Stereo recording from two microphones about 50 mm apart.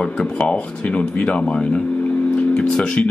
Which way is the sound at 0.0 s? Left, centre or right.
Left.